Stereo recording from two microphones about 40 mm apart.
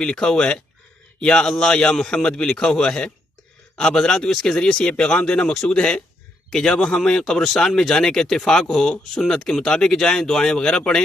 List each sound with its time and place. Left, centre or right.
0.0 s speech: centre